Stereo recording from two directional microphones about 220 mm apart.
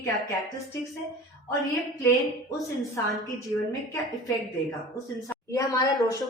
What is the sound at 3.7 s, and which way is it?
A woman's voice, 15° left (ahead or behind).